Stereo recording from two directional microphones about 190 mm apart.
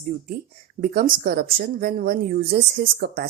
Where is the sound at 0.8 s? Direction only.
45° right (ahead or behind).